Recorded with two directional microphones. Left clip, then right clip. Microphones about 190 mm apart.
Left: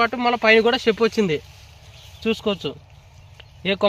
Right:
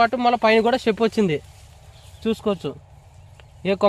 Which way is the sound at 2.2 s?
25° right (ahead or behind).